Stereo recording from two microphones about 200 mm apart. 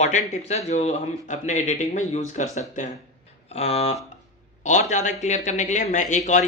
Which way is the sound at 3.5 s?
30° left (ahead or behind).